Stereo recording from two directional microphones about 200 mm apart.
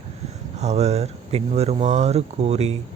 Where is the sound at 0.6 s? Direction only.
35° right (ahead or behind).